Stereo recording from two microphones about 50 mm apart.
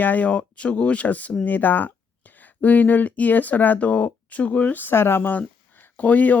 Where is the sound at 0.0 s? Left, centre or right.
Left.